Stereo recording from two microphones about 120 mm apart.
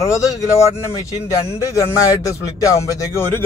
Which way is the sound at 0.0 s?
25° left (ahead or behind).